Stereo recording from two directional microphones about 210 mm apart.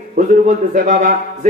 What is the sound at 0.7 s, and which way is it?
Speech, 35° right (ahead or behind).